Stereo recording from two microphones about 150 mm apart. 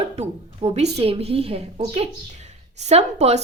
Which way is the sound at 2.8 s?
45° right (ahead or behind).